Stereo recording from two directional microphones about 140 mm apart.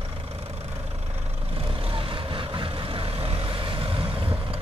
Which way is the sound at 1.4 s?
40° right (ahead or behind).